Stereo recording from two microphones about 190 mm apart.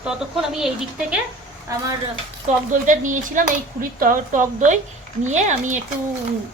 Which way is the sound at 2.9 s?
45° right (ahead or behind).